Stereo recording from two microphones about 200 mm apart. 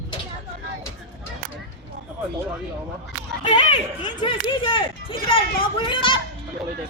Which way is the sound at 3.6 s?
25° left (ahead or behind).